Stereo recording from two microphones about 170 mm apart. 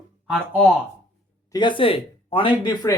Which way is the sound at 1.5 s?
25° left (ahead or behind).